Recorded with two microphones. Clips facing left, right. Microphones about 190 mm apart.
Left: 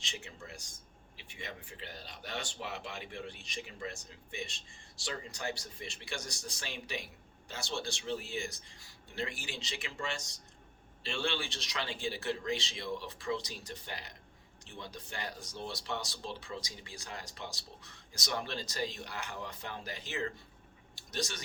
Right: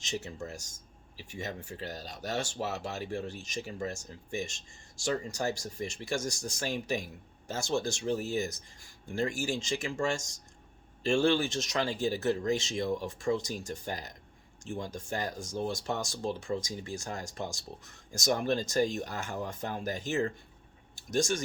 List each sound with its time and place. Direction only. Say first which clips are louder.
0.0 s speech: right 10 dB; 40° right (ahead or behind)